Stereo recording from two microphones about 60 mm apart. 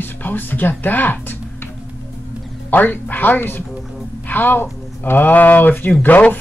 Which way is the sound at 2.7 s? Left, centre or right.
Left.